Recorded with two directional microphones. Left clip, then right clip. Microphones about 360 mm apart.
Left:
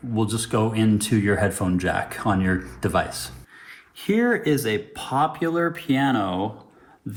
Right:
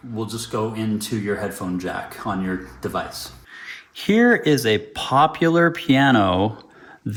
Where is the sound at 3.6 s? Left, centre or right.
Right.